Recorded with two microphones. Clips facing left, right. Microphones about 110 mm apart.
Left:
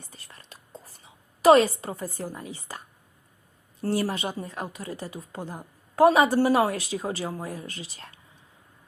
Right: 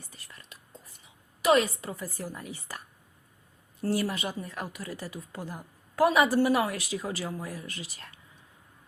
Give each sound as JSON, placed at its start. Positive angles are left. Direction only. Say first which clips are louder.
{"t": 0.0, "sound": "whispering", "louder": "left 2 dB", "side_deg": 30}
{"t": 3.8, "sound": "speech", "louder": "left 2 dB", "side_deg": 30}